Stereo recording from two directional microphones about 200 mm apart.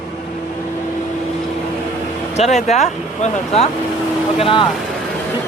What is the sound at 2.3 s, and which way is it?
Speech, 35° left (ahead or behind).